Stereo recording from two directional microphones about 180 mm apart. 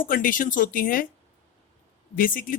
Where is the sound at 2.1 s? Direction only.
50° left (ahead or behind).